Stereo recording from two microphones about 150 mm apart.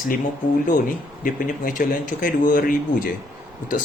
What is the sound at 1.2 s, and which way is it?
A man's voice, 65° left (ahead or behind).